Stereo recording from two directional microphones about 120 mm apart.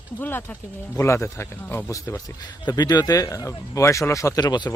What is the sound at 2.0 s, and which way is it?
Speech, 30° left (ahead or behind).